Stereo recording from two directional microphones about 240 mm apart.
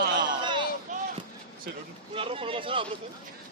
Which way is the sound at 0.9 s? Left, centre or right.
Right.